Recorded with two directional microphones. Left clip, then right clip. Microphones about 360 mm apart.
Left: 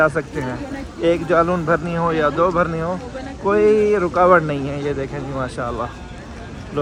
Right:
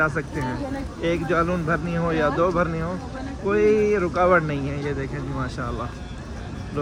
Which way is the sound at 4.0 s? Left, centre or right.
Left.